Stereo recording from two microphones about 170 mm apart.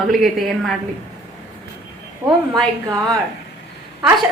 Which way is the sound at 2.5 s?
20° right (ahead or behind).